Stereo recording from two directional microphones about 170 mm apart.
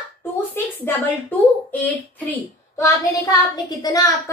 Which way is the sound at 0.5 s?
10° left (ahead or behind).